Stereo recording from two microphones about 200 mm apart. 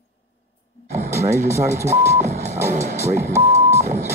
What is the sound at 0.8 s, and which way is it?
Speech, 35° right (ahead or behind).